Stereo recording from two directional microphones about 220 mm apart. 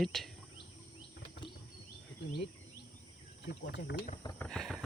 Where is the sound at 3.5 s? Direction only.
50° left (ahead or behind).